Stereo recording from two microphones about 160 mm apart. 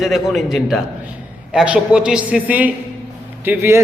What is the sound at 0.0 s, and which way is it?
A man's voice, centre (ahead or behind).